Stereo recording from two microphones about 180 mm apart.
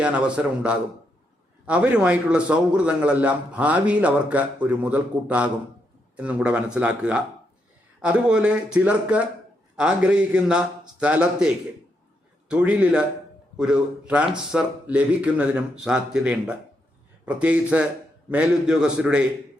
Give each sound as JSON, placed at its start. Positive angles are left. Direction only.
{"t": 0.0, "sound": "a man's voice", "side_deg": -5}